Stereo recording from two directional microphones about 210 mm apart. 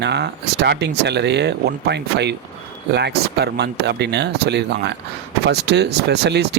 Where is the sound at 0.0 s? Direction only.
55° right (ahead or behind).